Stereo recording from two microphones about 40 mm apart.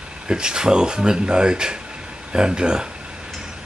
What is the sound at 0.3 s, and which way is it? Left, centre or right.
Speech, centre.